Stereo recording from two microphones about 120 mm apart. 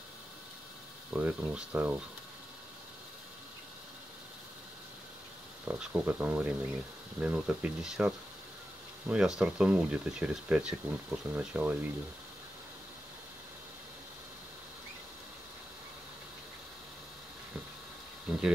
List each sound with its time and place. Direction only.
1.1 s speech: 10° right (ahead or behind)
5.7 s speech: 10° right (ahead or behind)
18.3 s a sound: 5° right (ahead or behind)